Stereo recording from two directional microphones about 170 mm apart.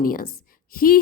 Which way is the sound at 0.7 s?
55° left (ahead or behind).